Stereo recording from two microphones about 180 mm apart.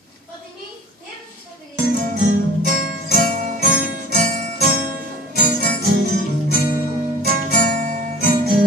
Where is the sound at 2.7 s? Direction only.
55° right (ahead or behind).